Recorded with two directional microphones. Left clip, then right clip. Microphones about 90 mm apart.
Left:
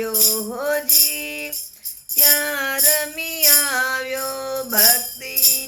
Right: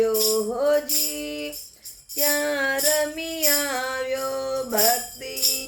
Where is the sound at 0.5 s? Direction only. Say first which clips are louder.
Even; 20° right (ahead or behind).